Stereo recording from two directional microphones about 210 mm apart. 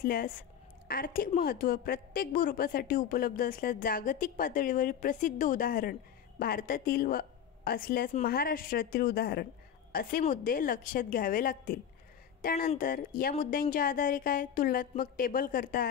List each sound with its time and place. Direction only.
0.0 s a woman's voice: 40° left (ahead or behind)